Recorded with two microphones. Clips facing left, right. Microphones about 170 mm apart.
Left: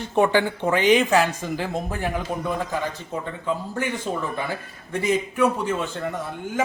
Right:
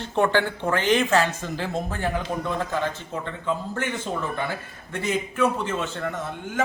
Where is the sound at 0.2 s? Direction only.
15° left (ahead or behind).